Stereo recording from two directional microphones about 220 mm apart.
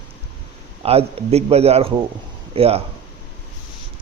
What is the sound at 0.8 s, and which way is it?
A man's voice, 25° right (ahead or behind).